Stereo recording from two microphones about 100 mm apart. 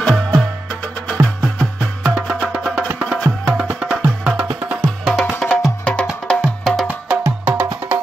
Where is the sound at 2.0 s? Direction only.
5° right (ahead or behind).